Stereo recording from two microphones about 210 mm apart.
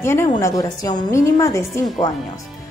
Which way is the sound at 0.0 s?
10° left (ahead or behind).